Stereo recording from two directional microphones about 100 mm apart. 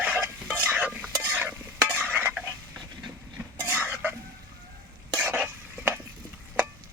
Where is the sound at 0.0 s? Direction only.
15° right (ahead or behind).